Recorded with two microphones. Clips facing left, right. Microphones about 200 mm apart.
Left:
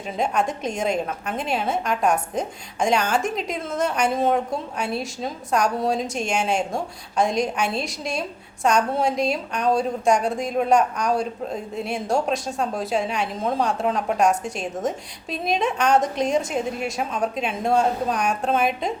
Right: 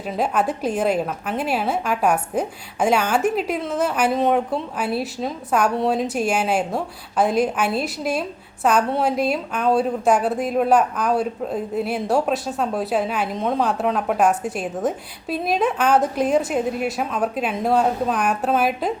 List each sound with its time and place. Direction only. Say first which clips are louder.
0.2 s a woman's voice: right 2 dB; 5° right (ahead or behind)